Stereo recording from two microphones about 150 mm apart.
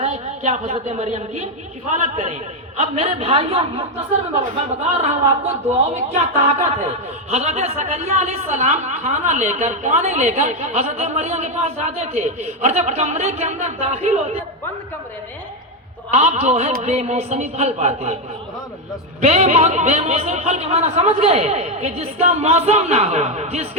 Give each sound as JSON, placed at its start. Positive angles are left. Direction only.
{"t": 0.0, "sound": "a woman's voice", "side_deg": -50}
{"t": 2.8, "sound": "a man's voice", "side_deg": -40}
{"t": 16.1, "sound": "speech", "side_deg": -45}
{"t": 19.2, "sound": "speech", "side_deg": -45}